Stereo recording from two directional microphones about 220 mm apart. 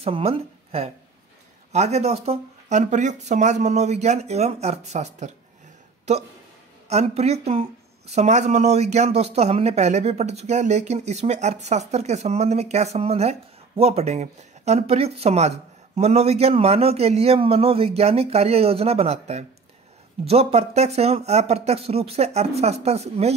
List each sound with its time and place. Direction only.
0.0 s a woman's voice: 25° right (ahead or behind)
6.9 s speech: 30° right (ahead or behind)